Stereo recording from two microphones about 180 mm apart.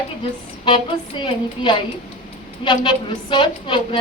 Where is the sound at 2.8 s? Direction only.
25° left (ahead or behind).